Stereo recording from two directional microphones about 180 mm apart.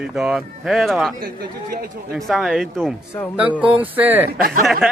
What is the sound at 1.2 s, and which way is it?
Speech, 55° right (ahead or behind).